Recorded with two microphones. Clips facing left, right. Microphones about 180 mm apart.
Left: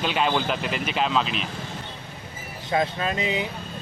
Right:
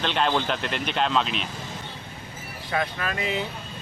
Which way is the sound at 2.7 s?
25° left (ahead or behind).